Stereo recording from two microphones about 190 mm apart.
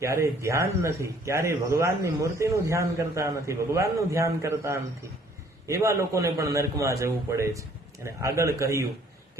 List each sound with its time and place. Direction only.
0.0 s speech: 15° right (ahead or behind)